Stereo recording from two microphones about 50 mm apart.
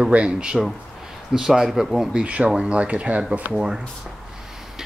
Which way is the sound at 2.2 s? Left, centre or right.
Right.